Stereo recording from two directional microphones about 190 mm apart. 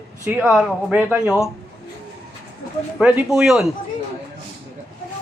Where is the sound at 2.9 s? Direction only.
5° right (ahead or behind).